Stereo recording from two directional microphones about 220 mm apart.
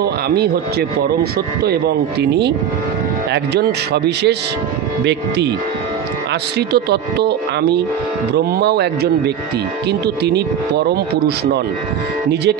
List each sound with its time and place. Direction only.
0.0 s speech: 45° right (ahead or behind)
3.5 s speech: 50° right (ahead or behind)
6.7 s speech: 50° right (ahead or behind)